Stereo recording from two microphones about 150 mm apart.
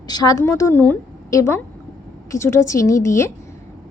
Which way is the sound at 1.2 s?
20° left (ahead or behind).